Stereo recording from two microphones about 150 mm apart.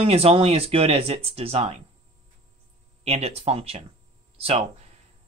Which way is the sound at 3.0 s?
45° right (ahead or behind).